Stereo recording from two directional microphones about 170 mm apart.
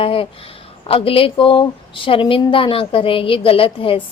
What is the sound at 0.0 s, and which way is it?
Speech, 35° left (ahead or behind).